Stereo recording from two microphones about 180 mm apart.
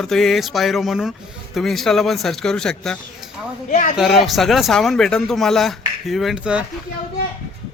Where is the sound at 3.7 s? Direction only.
45° left (ahead or behind).